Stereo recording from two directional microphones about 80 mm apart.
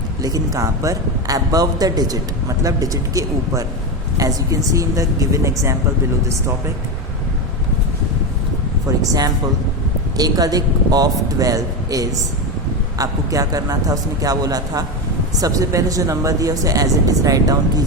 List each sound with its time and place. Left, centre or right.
0.2 s speech: right
9.0 s speech: right